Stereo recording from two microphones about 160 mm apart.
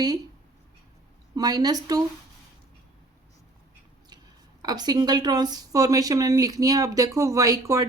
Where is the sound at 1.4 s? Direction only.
25° right (ahead or behind).